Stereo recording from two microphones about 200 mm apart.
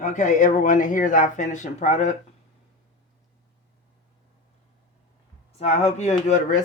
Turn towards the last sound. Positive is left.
turn(degrees=35)  # may be behind; listen again after turning